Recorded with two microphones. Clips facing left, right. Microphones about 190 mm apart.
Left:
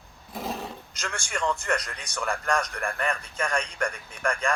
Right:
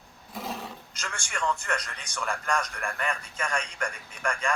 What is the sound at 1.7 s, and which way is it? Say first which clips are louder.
A man's voice: left 4 dB; 35° left (ahead or behind).